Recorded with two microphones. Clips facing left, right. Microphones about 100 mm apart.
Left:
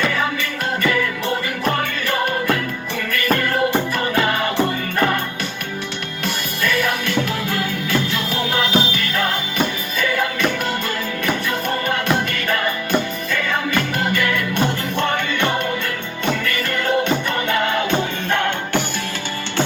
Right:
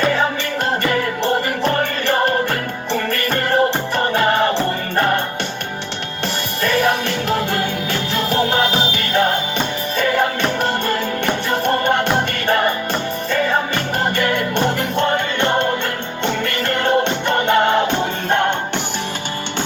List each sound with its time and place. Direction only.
0.0 s music: 35° right (ahead or behind)
6.2 s music: 35° right (ahead or behind)
14.9 s music: 20° right (ahead or behind)
16.2 s music: 35° right (ahead or behind)